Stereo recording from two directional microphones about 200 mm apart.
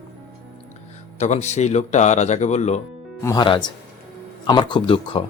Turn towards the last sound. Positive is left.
turn(degrees=25)  # may be behind; listen again after turning